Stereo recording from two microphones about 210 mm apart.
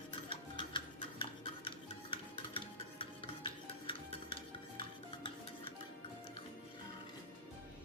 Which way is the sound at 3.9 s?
25° left (ahead or behind).